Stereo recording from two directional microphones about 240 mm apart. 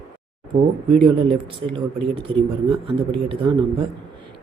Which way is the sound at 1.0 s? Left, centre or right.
Right.